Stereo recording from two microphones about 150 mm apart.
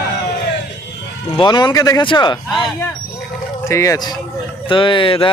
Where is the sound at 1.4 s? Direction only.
30° left (ahead or behind).